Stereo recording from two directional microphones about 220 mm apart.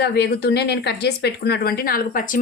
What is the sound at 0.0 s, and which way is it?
Speech, 50° left (ahead or behind).